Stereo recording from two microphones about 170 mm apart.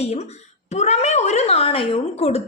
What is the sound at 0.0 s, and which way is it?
Speech, 40° left (ahead or behind).